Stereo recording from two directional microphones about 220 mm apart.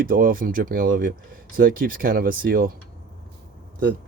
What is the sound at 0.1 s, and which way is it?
Speech, 40° right (ahead or behind).